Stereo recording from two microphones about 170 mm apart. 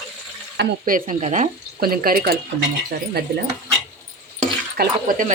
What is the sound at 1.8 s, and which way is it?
Speech, 60° right (ahead or behind).